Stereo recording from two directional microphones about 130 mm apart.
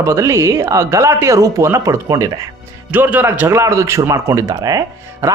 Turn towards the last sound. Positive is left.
turn(degrees=-25)  # may be behind; listen again after turning